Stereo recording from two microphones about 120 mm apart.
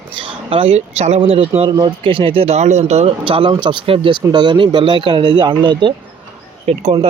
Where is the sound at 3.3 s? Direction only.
45° right (ahead or behind).